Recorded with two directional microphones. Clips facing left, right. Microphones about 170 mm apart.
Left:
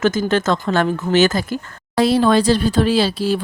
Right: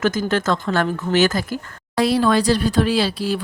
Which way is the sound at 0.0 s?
25° left (ahead or behind).